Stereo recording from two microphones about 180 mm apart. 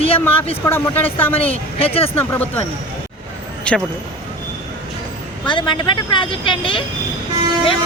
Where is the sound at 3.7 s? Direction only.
5° left (ahead or behind).